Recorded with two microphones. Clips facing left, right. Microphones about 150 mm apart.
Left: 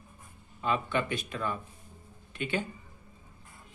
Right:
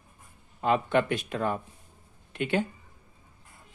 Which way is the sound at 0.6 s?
70° right (ahead or behind).